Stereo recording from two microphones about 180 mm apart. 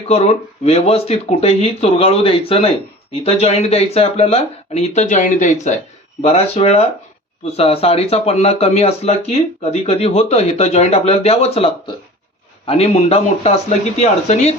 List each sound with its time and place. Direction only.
0.1 s speech: 35° left (ahead or behind)